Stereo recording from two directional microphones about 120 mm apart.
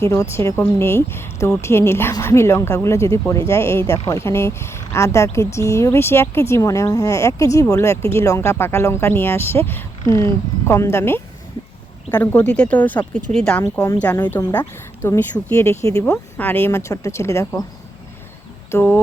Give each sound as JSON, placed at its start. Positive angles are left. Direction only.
{"t": 0.1, "sound": "speech", "side_deg": 20}
{"t": 12.2, "sound": "speech", "side_deg": 10}
{"t": 18.7, "sound": "speech", "side_deg": 20}